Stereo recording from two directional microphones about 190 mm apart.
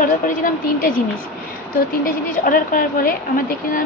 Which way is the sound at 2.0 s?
45° left (ahead or behind).